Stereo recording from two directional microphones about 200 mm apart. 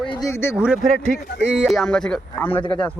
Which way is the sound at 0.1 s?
15° left (ahead or behind).